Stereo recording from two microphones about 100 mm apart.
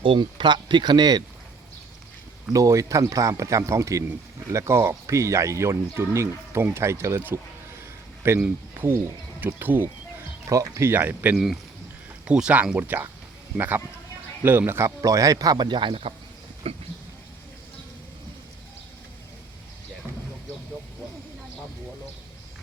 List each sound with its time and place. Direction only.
0.0 s speech: 55° right (ahead or behind)
2.5 s a man's voice: 35° right (ahead or behind)
8.7 s a sound: 25° right (ahead or behind)
9.5 s speech: 20° right (ahead or behind)
10.5 s a man's voice: 30° right (ahead or behind); by 16.1 s 70° right (ahead or behind)
16.7 s a sound: 85° right